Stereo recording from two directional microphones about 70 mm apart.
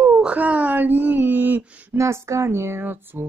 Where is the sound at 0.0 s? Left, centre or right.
Centre.